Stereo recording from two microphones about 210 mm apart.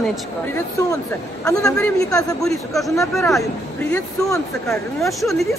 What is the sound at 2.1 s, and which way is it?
Speech, 15° left (ahead or behind).